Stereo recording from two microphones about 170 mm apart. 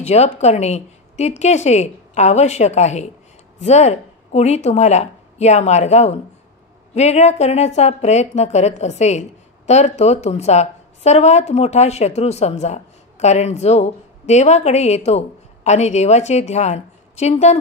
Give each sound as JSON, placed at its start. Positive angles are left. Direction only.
{"t": 0.0, "sound": "a woman's voice", "side_deg": 40}